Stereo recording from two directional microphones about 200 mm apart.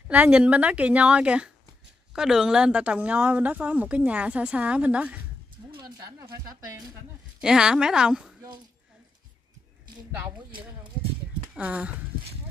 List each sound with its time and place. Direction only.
0.1 s a woman's voice: 5° right (ahead or behind)
5.7 s a woman's voice: 20° right (ahead or behind)
7.4 s a woman's voice: 5° right (ahead or behind)
11.5 s speech: 5° right (ahead or behind)